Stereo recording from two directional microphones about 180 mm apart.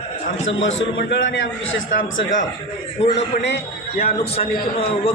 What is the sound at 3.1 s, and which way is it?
Speech, 70° left (ahead or behind).